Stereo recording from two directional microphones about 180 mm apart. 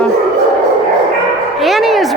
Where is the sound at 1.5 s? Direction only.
Centre (ahead or behind).